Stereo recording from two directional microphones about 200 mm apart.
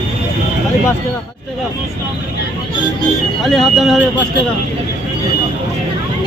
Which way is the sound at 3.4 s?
Centre (ahead or behind).